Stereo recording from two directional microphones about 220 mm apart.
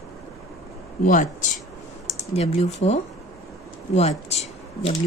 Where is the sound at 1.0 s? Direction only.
35° left (ahead or behind).